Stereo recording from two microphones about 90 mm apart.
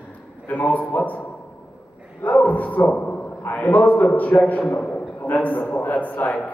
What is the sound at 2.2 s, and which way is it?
A man's voice, 15° left (ahead or behind).